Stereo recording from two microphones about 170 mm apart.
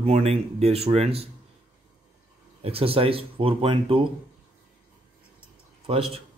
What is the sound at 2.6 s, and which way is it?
Speech, 35° right (ahead or behind).